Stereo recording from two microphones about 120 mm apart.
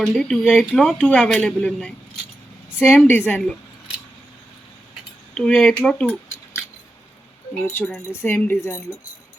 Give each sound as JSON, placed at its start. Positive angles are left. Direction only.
{"t": 0.1, "sound": "speech", "side_deg": 0}
{"t": 0.8, "sound": "speech", "side_deg": 10}
{"t": 5.3, "sound": "speech", "side_deg": 10}
{"t": 7.6, "sound": "speech", "side_deg": 20}